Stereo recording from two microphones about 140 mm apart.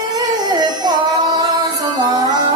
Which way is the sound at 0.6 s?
30° right (ahead or behind).